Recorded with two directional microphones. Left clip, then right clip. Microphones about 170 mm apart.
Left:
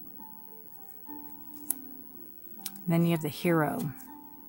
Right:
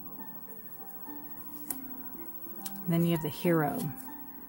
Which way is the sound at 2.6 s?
35° left (ahead or behind).